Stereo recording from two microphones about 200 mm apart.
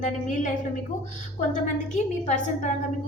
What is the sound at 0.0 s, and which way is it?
Speech, 35° left (ahead or behind).